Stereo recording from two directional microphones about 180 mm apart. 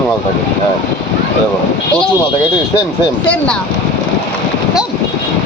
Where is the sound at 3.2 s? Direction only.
5° left (ahead or behind).